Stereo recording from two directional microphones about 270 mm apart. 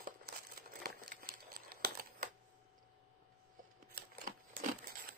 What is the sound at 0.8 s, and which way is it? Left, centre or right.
Crumpling, right.